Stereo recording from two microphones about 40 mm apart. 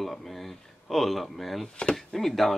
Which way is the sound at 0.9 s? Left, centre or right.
Centre.